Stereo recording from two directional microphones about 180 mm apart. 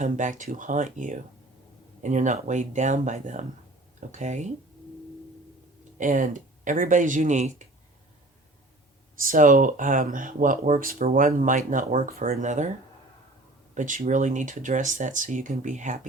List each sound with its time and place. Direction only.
0.0 s speech: 45° right (ahead or behind)
6.0 s speech: 45° right (ahead or behind)
9.2 s speech: 50° right (ahead or behind)
13.7 s speech: 45° right (ahead or behind)